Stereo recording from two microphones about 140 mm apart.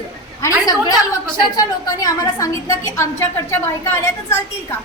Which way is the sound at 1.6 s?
25° left (ahead or behind).